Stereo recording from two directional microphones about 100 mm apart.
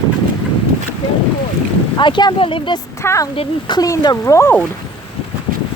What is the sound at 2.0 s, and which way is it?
Speech, 50° left (ahead or behind).